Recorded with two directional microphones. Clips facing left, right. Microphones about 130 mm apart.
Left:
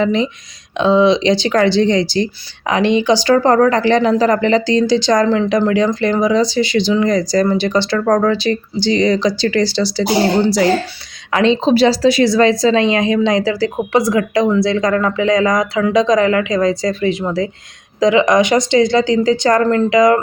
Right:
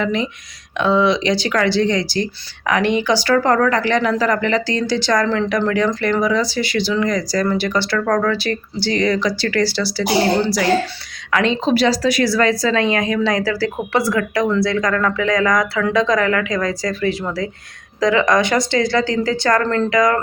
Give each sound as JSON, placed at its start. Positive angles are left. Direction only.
{"t": 0.0, "sound": "speech", "side_deg": 25}
{"t": 11.3, "sound": "speech", "side_deg": 25}